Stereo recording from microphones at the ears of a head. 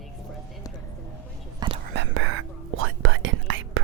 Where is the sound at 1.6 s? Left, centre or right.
Right.